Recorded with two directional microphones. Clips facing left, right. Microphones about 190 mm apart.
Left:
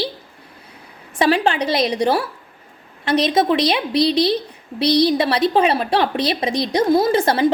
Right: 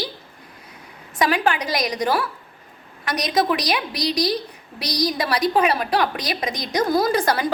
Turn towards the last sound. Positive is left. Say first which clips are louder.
# left 4 dB
turn(degrees=25)  # may be behind; listen again after turning